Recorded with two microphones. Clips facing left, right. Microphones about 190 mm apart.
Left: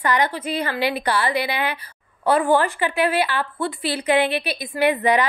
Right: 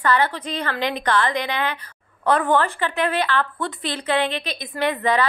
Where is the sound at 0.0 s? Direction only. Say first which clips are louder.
Even; 15° left (ahead or behind).